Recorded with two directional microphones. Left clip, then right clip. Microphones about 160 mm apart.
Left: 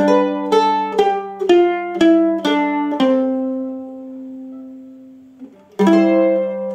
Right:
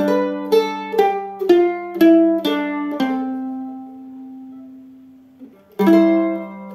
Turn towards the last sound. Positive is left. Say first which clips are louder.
# left 4 dB
turn(degrees=20)  # may be behind; listen again after turning